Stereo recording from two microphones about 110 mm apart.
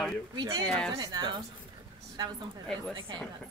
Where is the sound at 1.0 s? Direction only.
40° right (ahead or behind).